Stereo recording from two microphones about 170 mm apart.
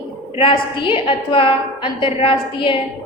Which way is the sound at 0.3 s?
30° left (ahead or behind).